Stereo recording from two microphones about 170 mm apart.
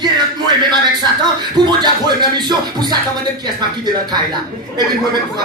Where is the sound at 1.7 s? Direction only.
25° right (ahead or behind).